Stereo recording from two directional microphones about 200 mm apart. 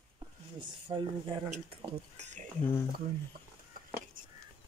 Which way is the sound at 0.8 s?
25° right (ahead or behind).